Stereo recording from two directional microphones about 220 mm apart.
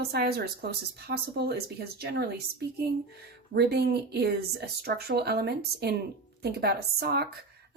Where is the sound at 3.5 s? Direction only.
45° right (ahead or behind).